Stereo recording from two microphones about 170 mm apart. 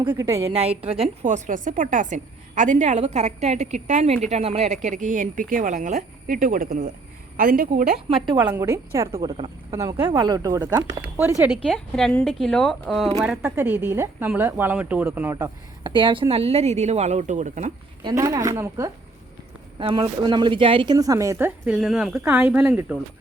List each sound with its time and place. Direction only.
0.1 s speech: 15° right (ahead or behind)
0.4 s a woman's voice: 35° right (ahead or behind); by 7.9 s 50° right (ahead or behind)
8.1 s a woman's voice: 30° right (ahead or behind)
8.6 s a woman's voice: 15° right (ahead or behind)
11.7 s a woman's voice: 5° left (ahead or behind)
13.3 s speech: 10° right (ahead or behind)
15.9 s a woman's voice: 30° right (ahead or behind); by 17.7 s 45° right (ahead or behind)
18.0 s a woman's voice: 20° right (ahead or behind)
19.8 s a woman's voice: 30° right (ahead or behind); by 23.0 s 10° right (ahead or behind)